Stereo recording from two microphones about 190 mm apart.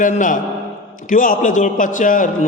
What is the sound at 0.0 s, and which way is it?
A man's voice, 40° left (ahead or behind).